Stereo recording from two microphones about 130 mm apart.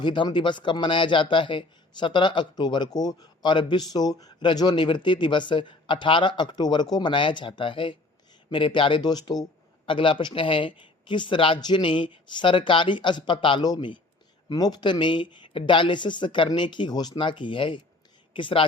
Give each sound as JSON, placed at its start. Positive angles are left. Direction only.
{"t": 0.0, "sound": "speech", "side_deg": 35}